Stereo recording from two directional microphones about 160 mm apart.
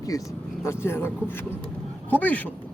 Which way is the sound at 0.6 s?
15° left (ahead or behind).